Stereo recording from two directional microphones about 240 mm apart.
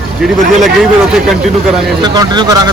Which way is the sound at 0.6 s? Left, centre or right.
Centre.